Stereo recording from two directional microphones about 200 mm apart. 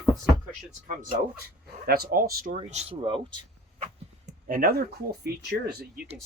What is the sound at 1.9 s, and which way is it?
Speech, 50° right (ahead or behind).